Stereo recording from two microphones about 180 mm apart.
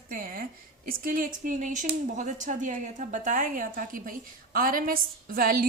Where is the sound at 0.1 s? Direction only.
50° right (ahead or behind).